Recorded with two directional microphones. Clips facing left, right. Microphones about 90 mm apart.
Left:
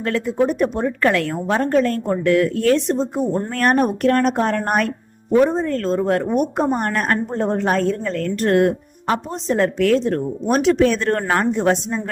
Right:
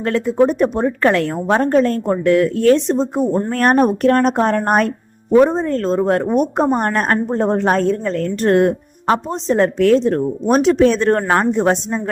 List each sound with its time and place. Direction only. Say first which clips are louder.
0.0 s a woman's voice: right 4 dB; 35° right (ahead or behind)